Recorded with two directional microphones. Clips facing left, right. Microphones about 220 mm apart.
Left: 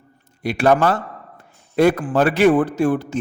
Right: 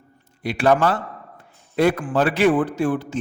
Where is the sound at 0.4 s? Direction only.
45° left (ahead or behind).